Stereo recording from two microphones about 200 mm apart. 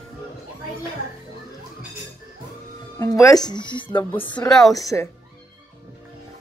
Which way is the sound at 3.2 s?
20° left (ahead or behind).